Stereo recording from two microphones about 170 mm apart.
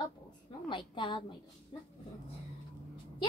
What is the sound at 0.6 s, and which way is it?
Speech, 30° left (ahead or behind).